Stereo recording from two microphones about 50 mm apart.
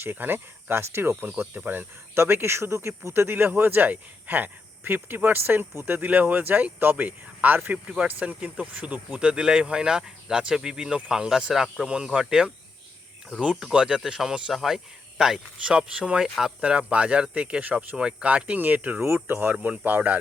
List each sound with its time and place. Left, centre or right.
0.0 s speech: right
1.5 s speech: right
2.1 s speech: right
3.1 s speech: right; by 12.5 s centre
13.7 s speech: centre; by 20.1 s right